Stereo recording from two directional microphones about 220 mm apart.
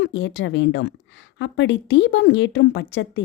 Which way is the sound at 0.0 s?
60° left (ahead or behind).